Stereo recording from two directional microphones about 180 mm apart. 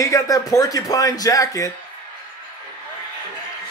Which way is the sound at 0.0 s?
20° left (ahead or behind).